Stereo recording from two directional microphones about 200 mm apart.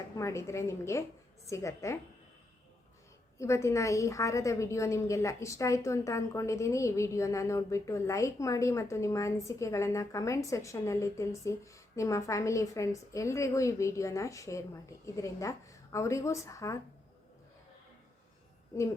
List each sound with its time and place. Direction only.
0.2 s a woman's voice: 15° left (ahead or behind)
3.3 s a woman's voice: 15° left (ahead or behind)